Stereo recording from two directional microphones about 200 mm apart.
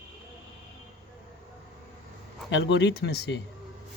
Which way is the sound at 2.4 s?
65° left (ahead or behind).